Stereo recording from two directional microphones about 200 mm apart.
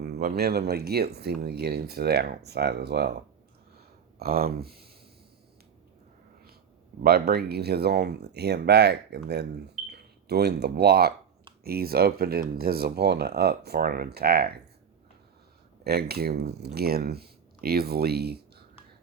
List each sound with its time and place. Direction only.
0.0 s speech: 50° right (ahead or behind)
3.8 s a sound: 50° right (ahead or behind)
7.0 s speech: 50° right (ahead or behind)
15.8 s speech: 50° right (ahead or behind)